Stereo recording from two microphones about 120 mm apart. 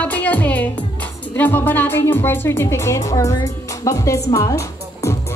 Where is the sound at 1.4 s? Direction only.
15° left (ahead or behind).